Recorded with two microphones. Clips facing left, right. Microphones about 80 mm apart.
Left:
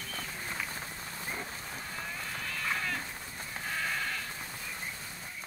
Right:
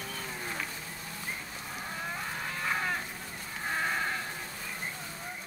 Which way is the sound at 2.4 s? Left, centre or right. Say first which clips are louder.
Right 2 dB; right.